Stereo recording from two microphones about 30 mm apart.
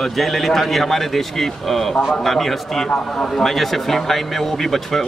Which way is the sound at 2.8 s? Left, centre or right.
Left.